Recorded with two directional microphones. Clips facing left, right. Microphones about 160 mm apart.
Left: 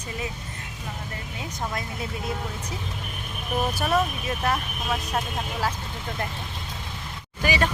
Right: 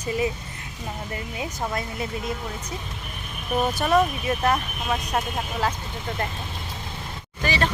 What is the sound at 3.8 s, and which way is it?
Speech, 5° left (ahead or behind).